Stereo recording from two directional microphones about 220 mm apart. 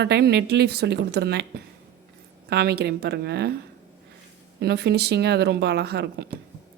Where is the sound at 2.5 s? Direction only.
45° right (ahead or behind).